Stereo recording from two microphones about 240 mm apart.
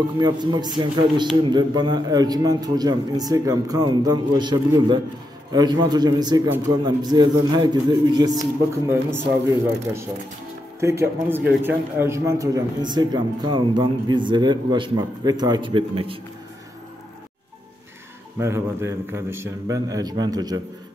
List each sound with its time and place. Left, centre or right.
0.2 s a man's voice: centre
10.8 s a man's voice: centre
18.4 s a man's voice: centre